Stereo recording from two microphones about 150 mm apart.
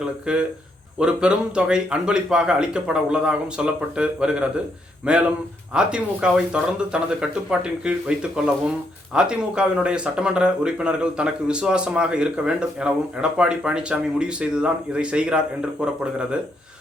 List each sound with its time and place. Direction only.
0.0 s a man's voice: 5° right (ahead or behind)